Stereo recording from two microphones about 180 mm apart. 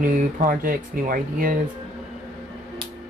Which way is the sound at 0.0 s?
50° right (ahead or behind).